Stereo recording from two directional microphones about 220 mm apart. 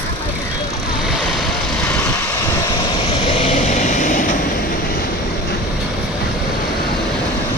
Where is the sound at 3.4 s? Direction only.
35° left (ahead or behind).